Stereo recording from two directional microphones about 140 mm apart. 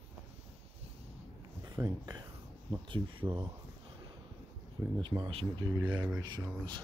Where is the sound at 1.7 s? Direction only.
30° right (ahead or behind).